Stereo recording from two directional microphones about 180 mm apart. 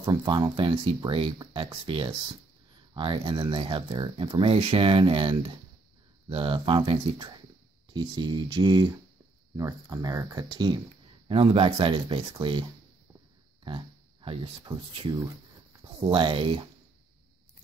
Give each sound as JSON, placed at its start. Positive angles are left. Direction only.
{"t": 0.0, "sound": "speech", "side_deg": -25}
{"t": 13.7, "sound": "a sound", "side_deg": -30}
{"t": 16.0, "sound": "speech", "side_deg": -30}